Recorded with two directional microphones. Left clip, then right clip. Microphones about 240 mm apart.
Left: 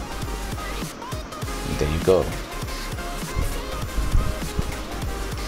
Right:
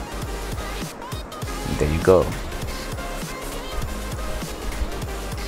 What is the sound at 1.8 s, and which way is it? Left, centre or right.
Speech, centre.